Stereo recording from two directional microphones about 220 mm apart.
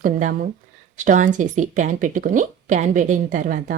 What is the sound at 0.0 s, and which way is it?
Speech, 35° right (ahead or behind).